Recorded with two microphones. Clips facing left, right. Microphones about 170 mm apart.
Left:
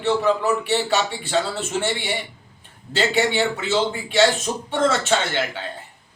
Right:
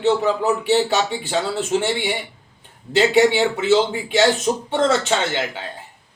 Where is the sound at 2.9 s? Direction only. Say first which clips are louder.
Right 5 dB; 20° right (ahead or behind).